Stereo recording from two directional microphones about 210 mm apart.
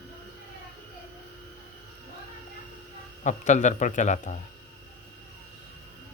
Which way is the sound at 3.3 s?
35° left (ahead or behind).